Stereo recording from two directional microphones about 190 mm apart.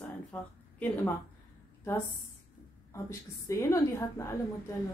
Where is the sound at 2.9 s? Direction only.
15° left (ahead or behind).